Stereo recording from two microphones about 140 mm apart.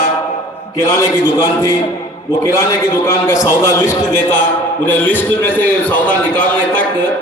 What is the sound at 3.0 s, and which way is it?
A man's voice, 20° left (ahead or behind).